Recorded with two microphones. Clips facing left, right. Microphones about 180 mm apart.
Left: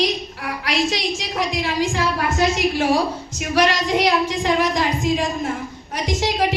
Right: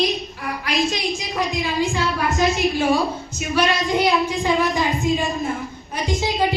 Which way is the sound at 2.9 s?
80° left.